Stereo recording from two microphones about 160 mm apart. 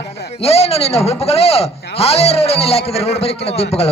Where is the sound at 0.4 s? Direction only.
40° left (ahead or behind).